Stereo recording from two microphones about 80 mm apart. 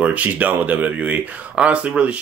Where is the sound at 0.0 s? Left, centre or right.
Centre.